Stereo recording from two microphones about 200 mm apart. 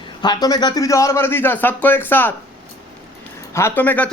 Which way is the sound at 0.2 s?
20° left (ahead or behind).